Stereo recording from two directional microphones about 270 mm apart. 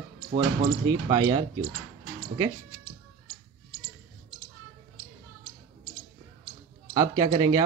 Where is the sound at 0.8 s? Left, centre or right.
Centre.